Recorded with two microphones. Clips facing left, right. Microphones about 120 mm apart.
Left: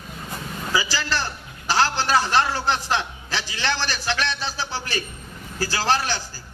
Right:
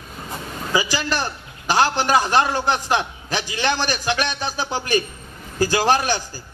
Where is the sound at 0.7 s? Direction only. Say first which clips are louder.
Right 3 dB; 15° right (ahead or behind).